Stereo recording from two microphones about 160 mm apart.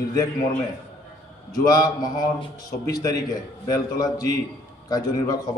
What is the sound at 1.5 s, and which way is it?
A man's voice, 25° left (ahead or behind).